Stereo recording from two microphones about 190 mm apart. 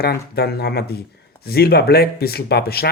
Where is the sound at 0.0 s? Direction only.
55° left (ahead or behind).